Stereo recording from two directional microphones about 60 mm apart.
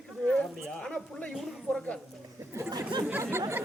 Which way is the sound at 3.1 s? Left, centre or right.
Right.